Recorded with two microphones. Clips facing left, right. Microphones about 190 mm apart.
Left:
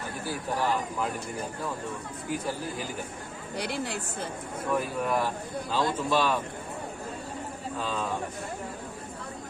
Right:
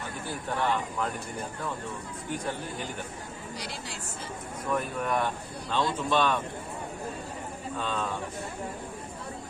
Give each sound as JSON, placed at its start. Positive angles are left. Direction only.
{"t": 0.3, "sound": "speech", "side_deg": 5}
{"t": 2.3, "sound": "speech", "side_deg": 5}
{"t": 3.6, "sound": "a woman's voice", "side_deg": 60}
{"t": 4.7, "sound": "speech", "side_deg": 5}
{"t": 7.8, "sound": "speech", "side_deg": 0}